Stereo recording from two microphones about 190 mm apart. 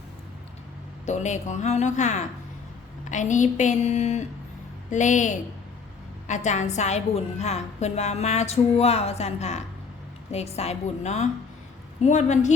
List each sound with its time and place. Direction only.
1.0 s a woman's voice: 40° left (ahead or behind)